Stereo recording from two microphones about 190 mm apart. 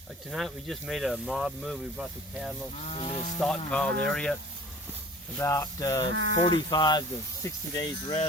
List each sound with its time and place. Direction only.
0.3 s speech: centre (ahead or behind)
2.7 s a sound: 35° left (ahead or behind)
3.4 s speech: 5° left (ahead or behind)
5.4 s speech: 15° left (ahead or behind)
6.1 s speech: 80° right
6.4 s speech: 20° left (ahead or behind)